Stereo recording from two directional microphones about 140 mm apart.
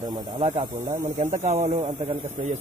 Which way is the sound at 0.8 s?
20° right (ahead or behind).